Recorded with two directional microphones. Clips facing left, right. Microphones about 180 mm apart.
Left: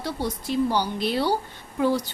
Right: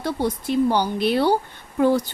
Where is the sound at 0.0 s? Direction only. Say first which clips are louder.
Right 5 dB; 55° right (ahead or behind).